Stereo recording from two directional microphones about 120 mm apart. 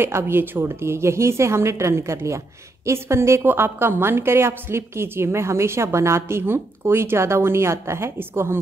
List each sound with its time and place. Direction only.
0.0 s a woman's voice: 20° right (ahead or behind)